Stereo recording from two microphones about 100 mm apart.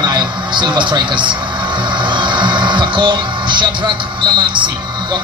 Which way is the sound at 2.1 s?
50° right (ahead or behind).